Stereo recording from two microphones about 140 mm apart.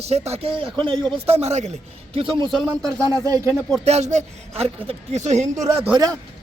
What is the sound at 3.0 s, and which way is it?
Speech, 25° right (ahead or behind).